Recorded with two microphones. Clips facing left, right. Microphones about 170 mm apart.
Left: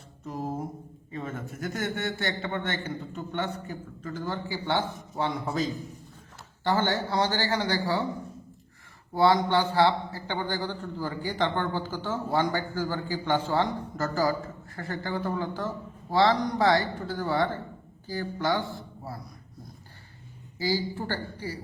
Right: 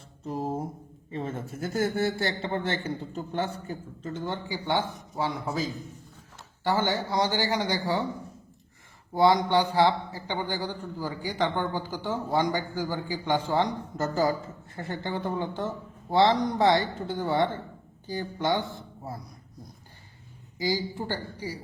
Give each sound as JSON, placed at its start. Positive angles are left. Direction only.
{"t": 0.3, "sound": "a man's voice", "side_deg": -30}
{"t": 4.9, "sound": "a man's voice", "side_deg": 0}
{"t": 6.7, "sound": "a man's voice", "side_deg": -10}
{"t": 9.1, "sound": "a man's voice", "side_deg": -15}
{"t": 20.6, "sound": "a man's voice", "side_deg": -15}